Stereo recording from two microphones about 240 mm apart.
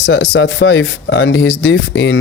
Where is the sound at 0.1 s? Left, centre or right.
Left.